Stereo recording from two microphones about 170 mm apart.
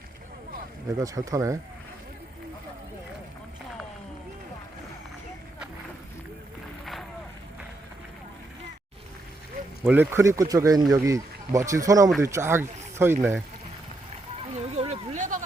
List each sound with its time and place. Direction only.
0.9 s speech: 20° right (ahead or behind)
9.8 s speech: 10° right (ahead or behind)
14.5 s a sound: 40° right (ahead or behind)